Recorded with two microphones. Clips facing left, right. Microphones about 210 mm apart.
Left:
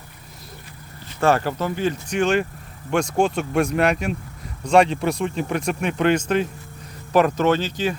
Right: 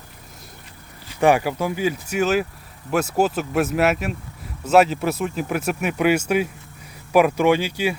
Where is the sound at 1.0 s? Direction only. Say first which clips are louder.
Right 2 dB; 10° right (ahead or behind).